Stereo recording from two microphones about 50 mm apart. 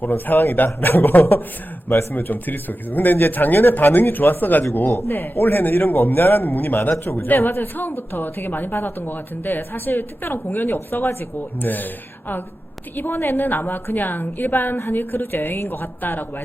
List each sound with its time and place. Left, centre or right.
0.0 s a woman's voice: left
10.9 s a man's voice: left
11.3 s a woman's voice: left
13.0 s a woman's voice: left